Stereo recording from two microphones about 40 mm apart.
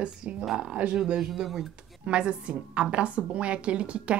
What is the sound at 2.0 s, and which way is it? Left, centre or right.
A woman's voice, right.